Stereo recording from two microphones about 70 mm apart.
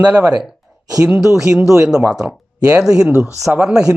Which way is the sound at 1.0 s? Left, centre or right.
Centre.